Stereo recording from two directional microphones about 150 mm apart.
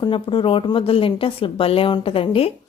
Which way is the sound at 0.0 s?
35° left (ahead or behind).